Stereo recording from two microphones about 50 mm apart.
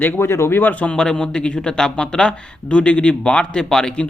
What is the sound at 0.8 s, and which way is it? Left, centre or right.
A man's voice, centre.